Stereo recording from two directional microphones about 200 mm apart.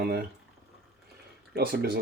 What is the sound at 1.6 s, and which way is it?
Speech, 50° right (ahead or behind).